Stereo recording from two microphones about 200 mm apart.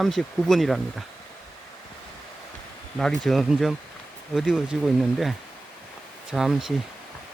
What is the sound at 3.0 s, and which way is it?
Speech, centre (ahead or behind).